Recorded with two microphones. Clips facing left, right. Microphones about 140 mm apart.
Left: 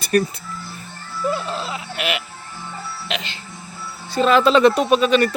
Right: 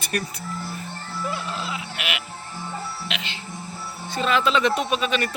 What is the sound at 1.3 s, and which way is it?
Sheep, 35° left (ahead or behind).